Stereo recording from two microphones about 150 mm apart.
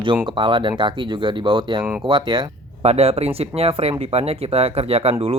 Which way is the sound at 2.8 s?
45° right (ahead or behind).